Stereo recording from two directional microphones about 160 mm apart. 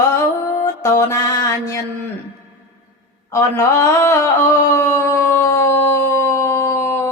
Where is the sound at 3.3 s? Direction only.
20° left (ahead or behind).